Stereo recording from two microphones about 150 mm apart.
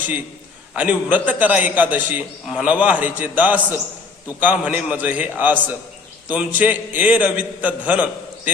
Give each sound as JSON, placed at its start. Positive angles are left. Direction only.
{"t": 0.8, "sound": "a man's voice", "side_deg": -10}